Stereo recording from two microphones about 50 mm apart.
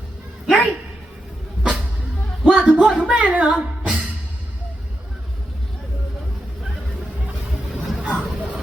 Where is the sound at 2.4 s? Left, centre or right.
Right.